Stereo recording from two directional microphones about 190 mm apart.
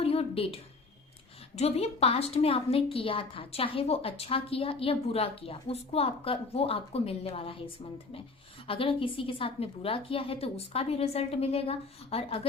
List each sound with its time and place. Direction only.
0.0 s a sound: 30° left (ahead or behind)
1.5 s a woman's voice: 30° left (ahead or behind)
8.6 s a woman's voice: 30° left (ahead or behind)